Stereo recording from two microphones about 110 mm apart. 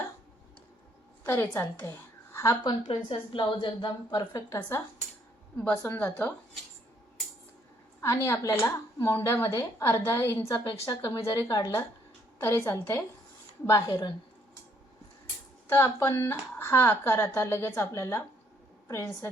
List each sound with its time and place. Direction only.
1.2 s speech: 20° left (ahead or behind)
2.3 s a sound: 30° left (ahead or behind)
2.6 s a woman's voice: 50° left (ahead or behind); by 4.8 s 30° left (ahead or behind)
5.5 s a woman's voice: 15° left (ahead or behind)
8.0 s a woman's voice: 25° left (ahead or behind)
15.7 s speech: 25° left (ahead or behind)